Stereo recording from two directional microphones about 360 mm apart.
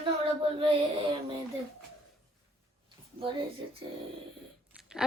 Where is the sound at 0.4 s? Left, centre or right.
Centre.